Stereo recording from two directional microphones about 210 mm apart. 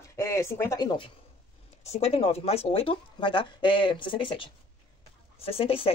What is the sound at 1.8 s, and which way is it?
Speech, 30° left (ahead or behind).